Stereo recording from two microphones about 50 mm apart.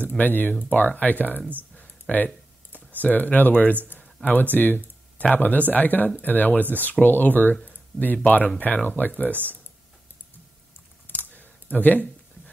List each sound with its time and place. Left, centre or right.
0.2 s speech: left
1.8 s computer keyboard: left
3.0 s speech: left
11.1 s a sound: left